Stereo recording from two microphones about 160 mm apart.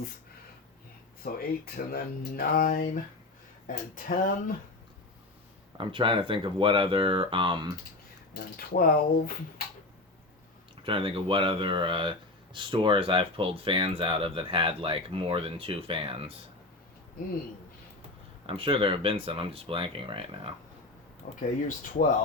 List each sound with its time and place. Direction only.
1.2 s speech: 70° left (ahead or behind)
5.7 s speech: 30° right (ahead or behind)
8.3 s speech: 70° left (ahead or behind)
10.8 s speech: 35° right (ahead or behind)
18.4 s speech: 35° right (ahead or behind)
21.2 s speech: 60° left (ahead or behind)